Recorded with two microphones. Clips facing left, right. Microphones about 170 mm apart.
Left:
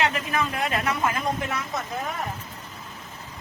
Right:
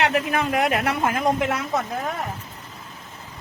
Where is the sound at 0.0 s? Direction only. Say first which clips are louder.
Right 4 dB; 65° right (ahead or behind).